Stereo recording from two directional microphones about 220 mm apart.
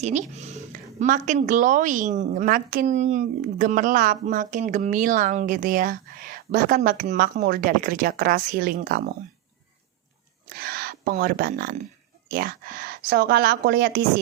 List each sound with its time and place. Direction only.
0.0 s a sound: 30° right (ahead or behind)
0.9 s a woman's voice: 35° right (ahead or behind)
10.5 s a woman's voice: 45° right (ahead or behind)